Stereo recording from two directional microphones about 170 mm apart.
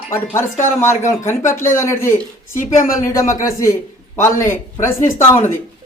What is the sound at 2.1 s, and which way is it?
Speech, 50° left (ahead or behind).